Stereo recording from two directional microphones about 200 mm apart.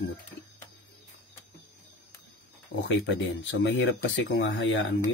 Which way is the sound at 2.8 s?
65° left (ahead or behind).